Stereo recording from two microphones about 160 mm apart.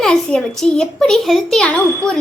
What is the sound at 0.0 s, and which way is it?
A child's voice, 5° left (ahead or behind).